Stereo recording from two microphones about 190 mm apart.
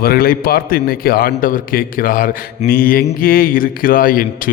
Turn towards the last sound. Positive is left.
turn(degrees=50)  # may be behind; listen again after turning